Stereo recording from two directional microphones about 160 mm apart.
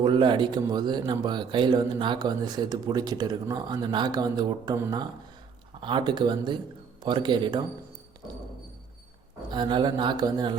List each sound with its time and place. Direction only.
0.0 s speech: 30° right (ahead or behind)
9.5 s speech: 30° right (ahead or behind)